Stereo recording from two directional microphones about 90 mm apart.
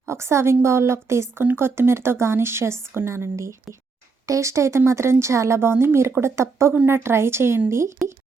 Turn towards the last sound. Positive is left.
turn(degrees=-30)  # may be behind; listen again after turning